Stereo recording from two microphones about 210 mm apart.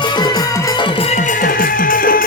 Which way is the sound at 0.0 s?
20° left (ahead or behind).